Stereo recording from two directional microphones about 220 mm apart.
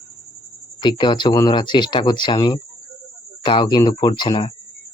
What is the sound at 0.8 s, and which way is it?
Speech, 20° left (ahead or behind).